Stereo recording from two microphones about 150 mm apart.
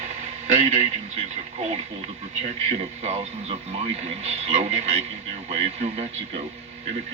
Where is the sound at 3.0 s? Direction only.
40° right (ahead or behind).